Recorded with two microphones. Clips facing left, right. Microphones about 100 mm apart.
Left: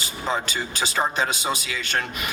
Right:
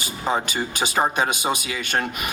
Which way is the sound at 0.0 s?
15° right (ahead or behind).